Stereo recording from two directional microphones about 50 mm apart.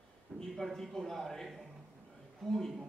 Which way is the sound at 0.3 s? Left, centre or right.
Right.